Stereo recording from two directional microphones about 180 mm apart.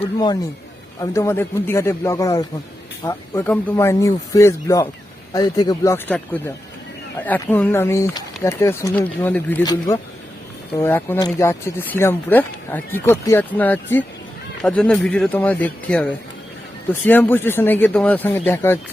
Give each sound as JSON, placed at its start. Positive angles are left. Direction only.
{"t": 0.0, "sound": "speech", "side_deg": 25}